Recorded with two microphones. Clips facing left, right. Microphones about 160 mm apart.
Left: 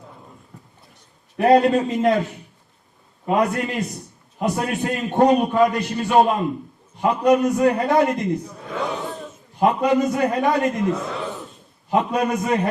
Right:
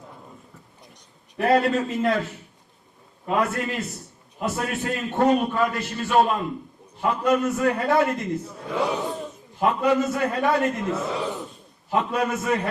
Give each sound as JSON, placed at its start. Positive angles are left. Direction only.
{"t": 1.4, "sound": "a man's voice", "side_deg": 20}
{"t": 8.4, "sound": "speech", "side_deg": -5}
{"t": 9.1, "sound": "a sound", "side_deg": 0}
{"t": 9.6, "sound": "a man's voice", "side_deg": 15}
{"t": 10.8, "sound": "a man's voice", "side_deg": -5}
{"t": 11.3, "sound": "a sound", "side_deg": 0}
{"t": 11.9, "sound": "a man's voice", "side_deg": 20}